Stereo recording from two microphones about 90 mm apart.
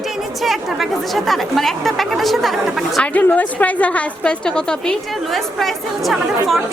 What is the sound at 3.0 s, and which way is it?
Speech, 15° left (ahead or behind).